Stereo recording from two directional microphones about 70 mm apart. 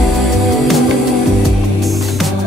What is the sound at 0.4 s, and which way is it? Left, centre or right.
Music, centre.